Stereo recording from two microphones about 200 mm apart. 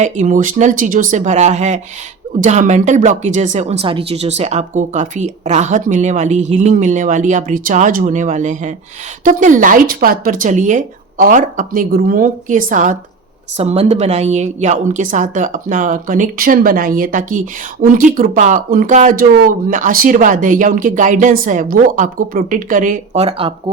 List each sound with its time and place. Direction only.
0.0 s speech: 40° right (ahead or behind)